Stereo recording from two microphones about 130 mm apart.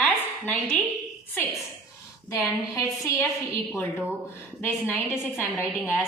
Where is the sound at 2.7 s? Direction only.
25° left (ahead or behind).